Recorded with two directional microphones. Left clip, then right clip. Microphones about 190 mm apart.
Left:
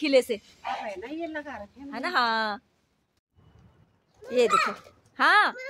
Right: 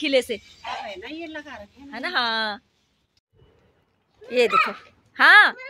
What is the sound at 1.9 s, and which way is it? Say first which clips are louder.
Speech: right 1 dB; 5° left (ahead or behind).